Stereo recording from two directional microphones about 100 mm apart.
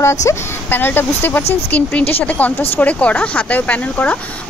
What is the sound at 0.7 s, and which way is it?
Speech, 20° left (ahead or behind).